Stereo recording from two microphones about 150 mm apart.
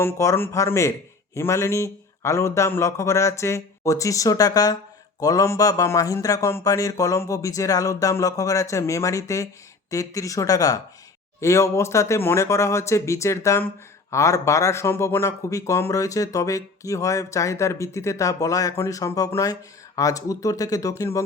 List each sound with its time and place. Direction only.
0.0 s speech: 20° left (ahead or behind)